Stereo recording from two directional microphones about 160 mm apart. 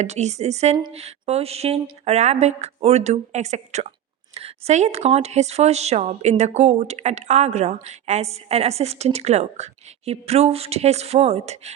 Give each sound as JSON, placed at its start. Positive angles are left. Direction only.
{"t": 0.0, "sound": "a woman's voice", "side_deg": -45}